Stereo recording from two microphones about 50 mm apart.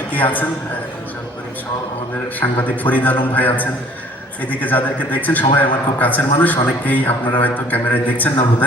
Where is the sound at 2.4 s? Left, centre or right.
Left.